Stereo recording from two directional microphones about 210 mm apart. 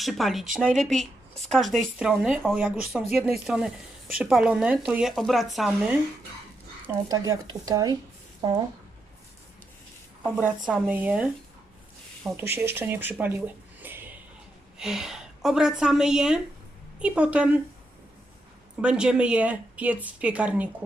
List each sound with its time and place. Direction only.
0.0 s a woman's voice: centre (ahead or behind)
6.8 s a woman's voice: 15° right (ahead or behind)
10.2 s a woman's voice: 5° right (ahead or behind)
13.8 s a sound: 10° right (ahead or behind)
14.8 s a woman's voice: centre (ahead or behind)
18.8 s a woman's voice: 5° right (ahead or behind)